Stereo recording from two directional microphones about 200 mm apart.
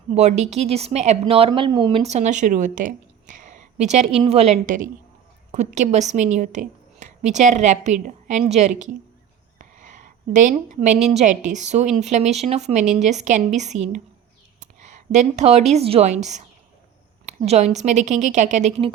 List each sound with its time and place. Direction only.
0.1 s speech: 35° right (ahead or behind)
9.6 s a sound: 40° right (ahead or behind)
11.1 s speech: 35° right (ahead or behind)